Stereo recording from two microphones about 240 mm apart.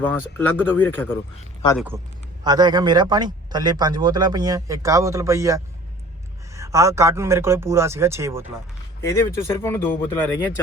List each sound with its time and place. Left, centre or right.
0.0 s speech: centre
2.4 s a man's voice: centre
9.0 s speech: centre